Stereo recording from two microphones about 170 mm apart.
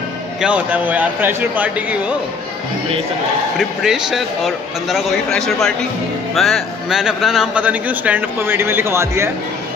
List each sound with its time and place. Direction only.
0.4 s a man's voice: 5° right (ahead or behind)
3.5 s a man's voice: centre (ahead or behind)